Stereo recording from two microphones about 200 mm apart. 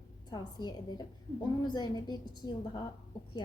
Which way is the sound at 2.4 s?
20° left (ahead or behind).